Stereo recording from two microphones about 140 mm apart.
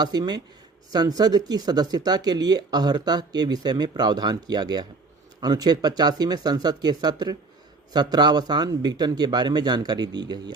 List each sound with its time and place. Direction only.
0.0 s a man's voice: 30° right (ahead or behind)